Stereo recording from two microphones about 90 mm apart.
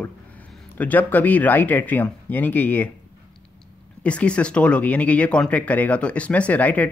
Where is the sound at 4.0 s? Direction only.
15° left (ahead or behind).